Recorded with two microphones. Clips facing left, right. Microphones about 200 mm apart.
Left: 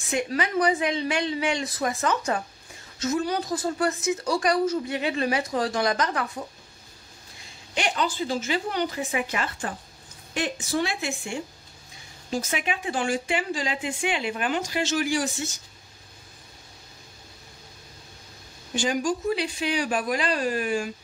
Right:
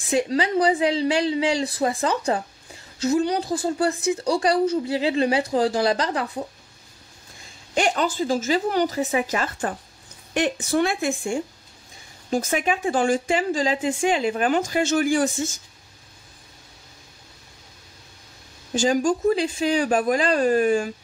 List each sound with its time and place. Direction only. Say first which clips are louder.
0.1 s a woman's voice: right 5 dB; 30° right (ahead or behind)
7.7 s a woman's voice: right 5 dB; 45° right (ahead or behind)
10.3 s a woman's voice: right 5 dB; 65° right (ahead or behind); by 15.5 s 50° right (ahead or behind)
18.8 s a woman's voice: right 5 dB; 45° right (ahead or behind)